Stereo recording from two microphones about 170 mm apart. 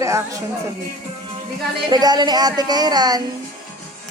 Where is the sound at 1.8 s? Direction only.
25° right (ahead or behind).